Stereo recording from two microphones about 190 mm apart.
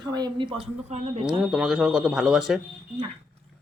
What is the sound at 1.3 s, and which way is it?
Speech, 5° right (ahead or behind).